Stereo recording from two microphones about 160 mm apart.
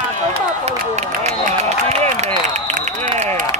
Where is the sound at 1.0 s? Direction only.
50° right (ahead or behind).